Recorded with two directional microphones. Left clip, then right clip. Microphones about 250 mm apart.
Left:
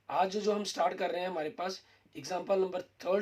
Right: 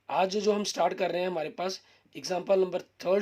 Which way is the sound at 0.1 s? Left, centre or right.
Right.